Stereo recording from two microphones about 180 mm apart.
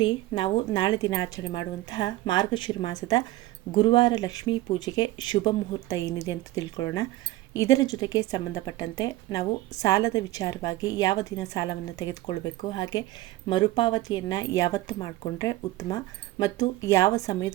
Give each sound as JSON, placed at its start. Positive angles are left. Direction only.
{"t": 0.0, "sound": "a woman's voice", "side_deg": 25}